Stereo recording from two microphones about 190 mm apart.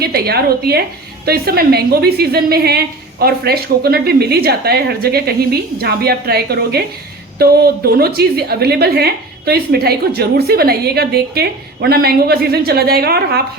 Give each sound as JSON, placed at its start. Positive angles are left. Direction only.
{"t": 0.0, "sound": "a woman's voice", "side_deg": -55}